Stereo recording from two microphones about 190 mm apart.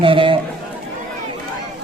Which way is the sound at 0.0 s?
30° right (ahead or behind).